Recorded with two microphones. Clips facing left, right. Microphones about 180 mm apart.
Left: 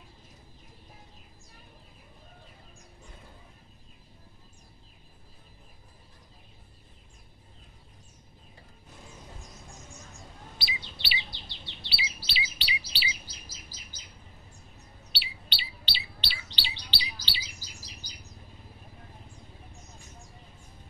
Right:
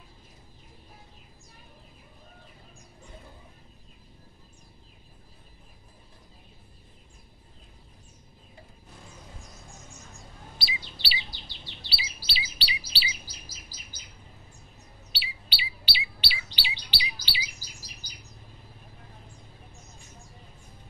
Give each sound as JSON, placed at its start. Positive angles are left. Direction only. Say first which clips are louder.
{"t": 10.6, "sound": "chirp", "louder": "right 1 dB", "side_deg": -35}
{"t": 15.1, "sound": "chirp", "louder": "right 3 dB", "side_deg": -5}
{"t": 16.5, "sound": "bird", "louder": "right 2 dB", "side_deg": -10}